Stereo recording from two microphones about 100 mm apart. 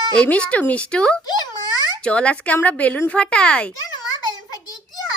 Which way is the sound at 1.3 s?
45° left (ahead or behind).